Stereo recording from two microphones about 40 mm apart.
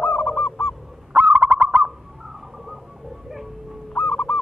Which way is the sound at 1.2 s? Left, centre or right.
Right.